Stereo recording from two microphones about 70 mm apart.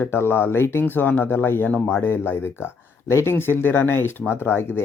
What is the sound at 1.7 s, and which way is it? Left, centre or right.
Speech, centre.